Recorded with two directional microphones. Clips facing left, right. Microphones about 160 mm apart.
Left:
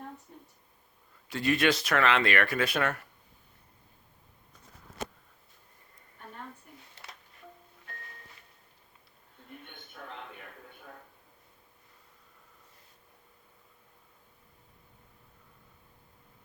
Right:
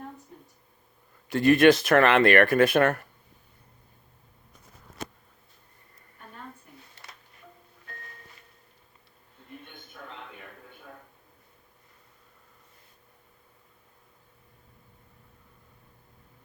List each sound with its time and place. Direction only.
1.3 s speech: 50° right (ahead or behind)